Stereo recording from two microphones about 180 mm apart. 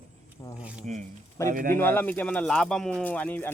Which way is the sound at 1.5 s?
50° right (ahead or behind).